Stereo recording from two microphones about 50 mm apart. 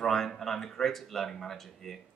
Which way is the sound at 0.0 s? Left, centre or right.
Centre.